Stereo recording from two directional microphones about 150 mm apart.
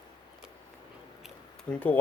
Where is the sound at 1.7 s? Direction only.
10° left (ahead or behind).